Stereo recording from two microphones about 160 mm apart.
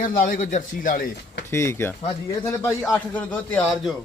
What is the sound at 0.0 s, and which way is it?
Speech, 60° left (ahead or behind).